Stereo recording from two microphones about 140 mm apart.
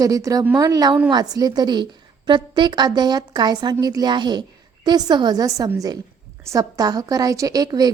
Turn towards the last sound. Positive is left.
turn(degrees=-25)  # may be behind; listen again after turning